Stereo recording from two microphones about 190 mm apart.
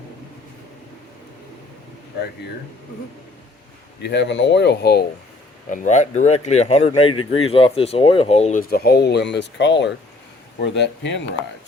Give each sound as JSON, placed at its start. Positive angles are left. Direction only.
{"t": 4.0, "sound": "speech", "side_deg": 65}
{"t": 5.6, "sound": "speech", "side_deg": 40}
{"t": 8.7, "sound": "speech", "side_deg": 55}